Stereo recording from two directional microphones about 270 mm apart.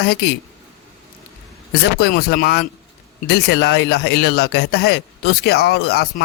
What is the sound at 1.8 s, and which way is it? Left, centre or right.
Speech, left.